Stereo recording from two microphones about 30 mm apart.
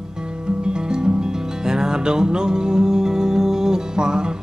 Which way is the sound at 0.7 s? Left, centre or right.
Right.